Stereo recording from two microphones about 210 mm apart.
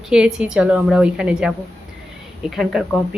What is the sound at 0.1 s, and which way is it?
Speech, 5° right (ahead or behind).